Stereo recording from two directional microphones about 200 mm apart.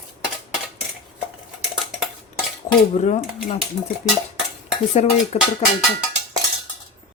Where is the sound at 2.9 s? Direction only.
35° left (ahead or behind).